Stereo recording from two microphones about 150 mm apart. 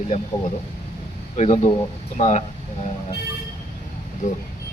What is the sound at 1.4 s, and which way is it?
Speech, 50° left (ahead or behind).